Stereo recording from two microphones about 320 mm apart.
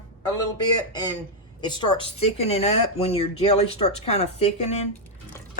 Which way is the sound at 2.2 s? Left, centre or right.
Centre.